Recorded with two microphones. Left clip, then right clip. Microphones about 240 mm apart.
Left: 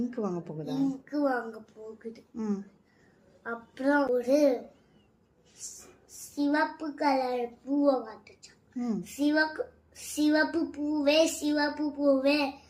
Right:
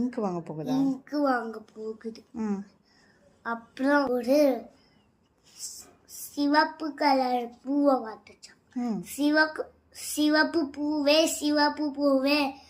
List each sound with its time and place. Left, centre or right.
0.0 s a woman's voice: centre
1.0 s child singing: right
2.3 s a woman's voice: centre
3.4 s child singing: right
6.3 s child singing: right
8.8 s speech: centre
9.0 s a woman's voice: right
10.2 s child singing: right